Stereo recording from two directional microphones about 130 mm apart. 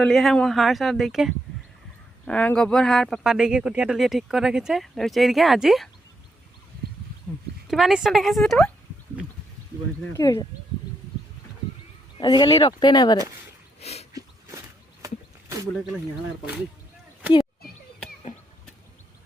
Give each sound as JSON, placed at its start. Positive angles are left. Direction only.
{"t": 0.0, "sound": "speech", "side_deg": 5}
{"t": 2.2, "sound": "speech", "side_deg": 10}
{"t": 7.7, "sound": "speech", "side_deg": 0}
{"t": 10.1, "sound": "speech", "side_deg": 25}
{"t": 12.2, "sound": "speech", "side_deg": 35}
{"t": 13.7, "sound": "a sound", "side_deg": 55}
{"t": 14.1, "sound": "a sound", "side_deg": -25}